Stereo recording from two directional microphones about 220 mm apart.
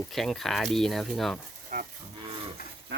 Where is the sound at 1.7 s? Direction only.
40° right (ahead or behind).